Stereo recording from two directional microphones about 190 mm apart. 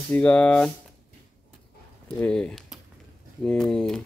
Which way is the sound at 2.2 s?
5° left (ahead or behind).